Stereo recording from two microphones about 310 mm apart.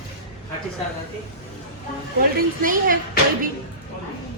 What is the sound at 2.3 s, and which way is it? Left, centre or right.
Speech, right.